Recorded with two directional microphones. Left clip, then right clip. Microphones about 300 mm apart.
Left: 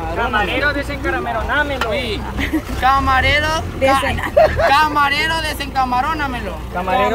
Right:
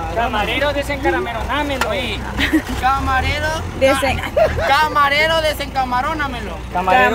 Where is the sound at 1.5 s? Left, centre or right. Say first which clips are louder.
Left 3 dB; right.